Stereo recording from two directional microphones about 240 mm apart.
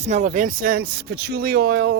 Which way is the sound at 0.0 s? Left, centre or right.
Right.